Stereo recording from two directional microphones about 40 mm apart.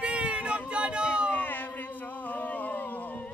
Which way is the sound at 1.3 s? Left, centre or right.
Left.